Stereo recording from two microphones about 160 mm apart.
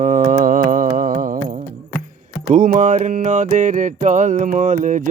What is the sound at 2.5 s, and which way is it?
Mantra, 60° right (ahead or behind).